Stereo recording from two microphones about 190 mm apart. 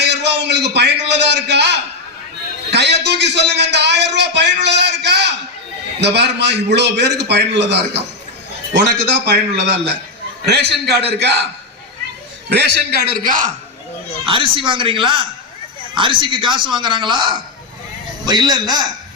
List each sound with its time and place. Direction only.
0.0 s a sound: 65° right (ahead or behind)
6.0 s a man's voice: 65° right (ahead or behind)
9.2 s a man's voice: 60° right (ahead or behind)
12.5 s a man's voice: 60° right (ahead or behind)
14.3 s a man's voice: 25° right (ahead or behind)